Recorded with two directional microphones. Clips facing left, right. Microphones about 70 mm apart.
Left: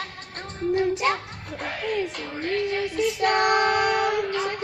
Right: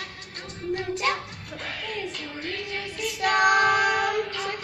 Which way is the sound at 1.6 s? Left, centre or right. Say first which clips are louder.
Left 6 dB; left.